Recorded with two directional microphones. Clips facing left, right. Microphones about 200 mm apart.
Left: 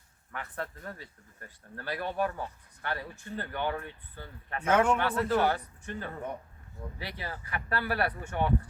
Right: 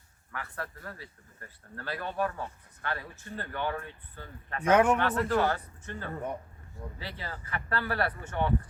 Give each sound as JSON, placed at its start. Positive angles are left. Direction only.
{"t": 0.3, "sound": "speech", "side_deg": 20}
{"t": 4.6, "sound": "a man's voice", "side_deg": -10}
{"t": 4.9, "sound": "speech", "side_deg": 10}